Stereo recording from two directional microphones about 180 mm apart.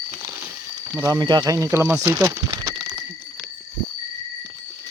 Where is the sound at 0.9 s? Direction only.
20° right (ahead or behind).